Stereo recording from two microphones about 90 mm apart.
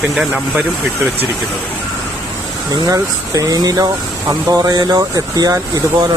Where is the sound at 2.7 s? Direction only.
45° right (ahead or behind).